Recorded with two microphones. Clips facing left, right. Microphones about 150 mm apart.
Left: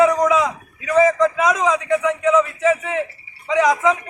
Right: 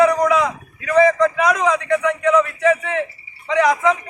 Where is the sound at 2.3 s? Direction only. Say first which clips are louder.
Right 1 dB; 5° left (ahead or behind).